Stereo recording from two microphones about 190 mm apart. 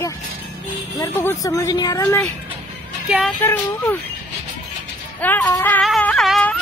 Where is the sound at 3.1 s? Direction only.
5° right (ahead or behind).